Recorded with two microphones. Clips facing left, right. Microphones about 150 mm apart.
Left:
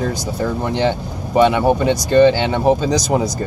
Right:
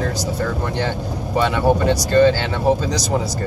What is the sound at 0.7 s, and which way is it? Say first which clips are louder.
Speech: left 4 dB; 20° left (ahead or behind).